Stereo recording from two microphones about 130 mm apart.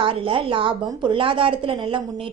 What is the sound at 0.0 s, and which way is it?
A woman's voice, 40° right (ahead or behind).